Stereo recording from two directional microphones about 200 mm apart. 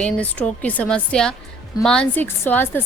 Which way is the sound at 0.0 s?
5° left (ahead or behind).